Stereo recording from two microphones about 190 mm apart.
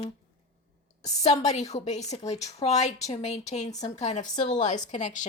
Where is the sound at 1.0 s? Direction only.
35° left (ahead or behind).